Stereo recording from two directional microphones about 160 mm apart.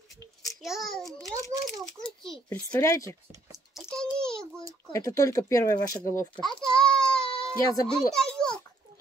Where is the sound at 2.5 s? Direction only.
15° left (ahead or behind).